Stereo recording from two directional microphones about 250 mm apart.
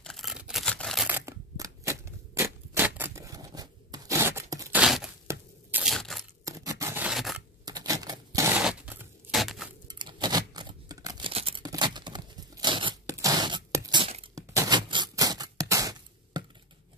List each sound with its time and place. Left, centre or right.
0.0 s camera: centre
4.8 s a sound: centre
6.4 s scissors: centre
7.6 s typewriter: centre
9.8 s tearing: centre
14.5 s a sound: centre